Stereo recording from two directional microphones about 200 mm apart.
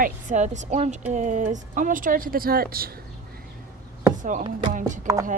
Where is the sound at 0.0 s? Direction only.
40° right (ahead or behind).